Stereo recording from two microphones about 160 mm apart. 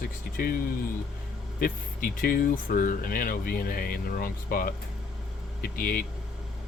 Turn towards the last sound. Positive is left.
turn(degrees=65)  # may be behind; listen again after turning